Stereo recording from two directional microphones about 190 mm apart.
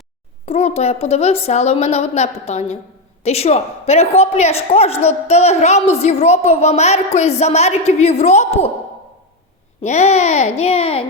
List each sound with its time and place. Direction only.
0.4 s a woman's voice: 35° left (ahead or behind)
9.8 s a woman's voice: 35° left (ahead or behind)